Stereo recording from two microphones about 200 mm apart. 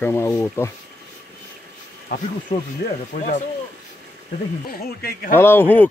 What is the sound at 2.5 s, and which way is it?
Speech, 25° left (ahead or behind).